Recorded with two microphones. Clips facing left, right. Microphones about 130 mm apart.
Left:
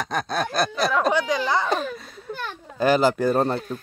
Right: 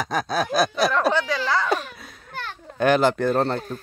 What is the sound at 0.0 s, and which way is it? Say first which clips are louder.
Speech: right 1 dB; centre (ahead or behind).